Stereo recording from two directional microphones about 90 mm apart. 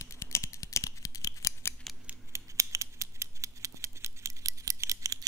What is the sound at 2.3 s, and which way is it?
Scissors, 35° right (ahead or behind).